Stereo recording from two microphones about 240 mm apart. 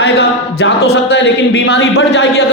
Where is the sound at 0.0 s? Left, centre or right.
Left.